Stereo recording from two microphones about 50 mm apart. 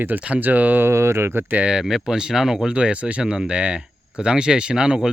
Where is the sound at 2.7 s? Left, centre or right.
Right.